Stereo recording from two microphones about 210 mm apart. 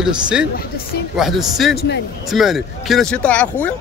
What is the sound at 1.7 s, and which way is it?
Speech, 55° left (ahead or behind).